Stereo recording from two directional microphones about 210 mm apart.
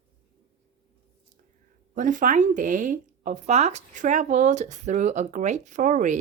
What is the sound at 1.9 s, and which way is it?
Speech, 40° right (ahead or behind).